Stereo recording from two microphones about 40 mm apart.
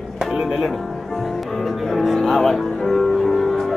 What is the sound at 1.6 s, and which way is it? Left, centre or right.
Music, centre.